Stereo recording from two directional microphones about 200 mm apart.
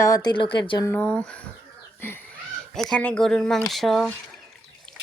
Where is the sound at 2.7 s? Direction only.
Centre (ahead or behind).